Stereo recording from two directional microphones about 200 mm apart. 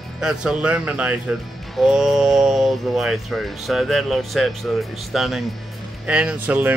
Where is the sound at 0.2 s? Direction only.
5° right (ahead or behind).